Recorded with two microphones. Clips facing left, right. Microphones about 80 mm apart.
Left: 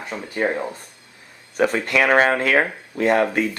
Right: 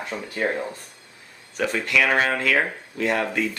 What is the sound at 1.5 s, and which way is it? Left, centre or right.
Speech, left.